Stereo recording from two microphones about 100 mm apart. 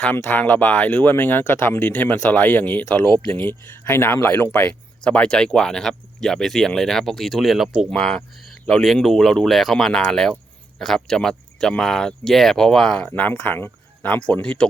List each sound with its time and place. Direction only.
0.2 s speech: 20° left (ahead or behind)